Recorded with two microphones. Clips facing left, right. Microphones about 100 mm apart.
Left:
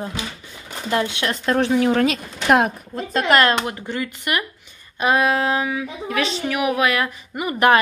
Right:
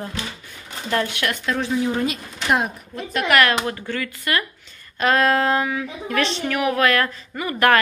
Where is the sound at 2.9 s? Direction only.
35° left (ahead or behind); by 4.4 s 20° left (ahead or behind).